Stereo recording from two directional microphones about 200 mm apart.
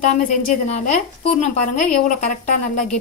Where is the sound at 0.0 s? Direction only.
40° left (ahead or behind).